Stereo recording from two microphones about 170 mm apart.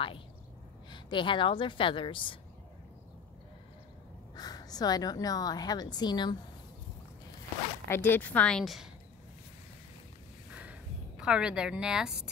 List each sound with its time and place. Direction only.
0.8 s a woman's voice: 30° left (ahead or behind)
4.4 s a woman's voice: 25° left (ahead or behind)
7.9 s a woman's voice: 15° left (ahead or behind)
10.5 s a sound: 10° right (ahead or behind)